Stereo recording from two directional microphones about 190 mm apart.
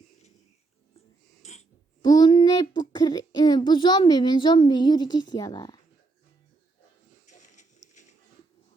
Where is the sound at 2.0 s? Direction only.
20° left (ahead or behind).